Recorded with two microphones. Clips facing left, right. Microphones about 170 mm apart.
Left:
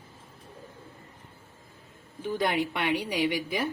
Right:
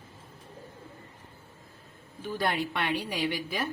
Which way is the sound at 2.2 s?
20° left (ahead or behind).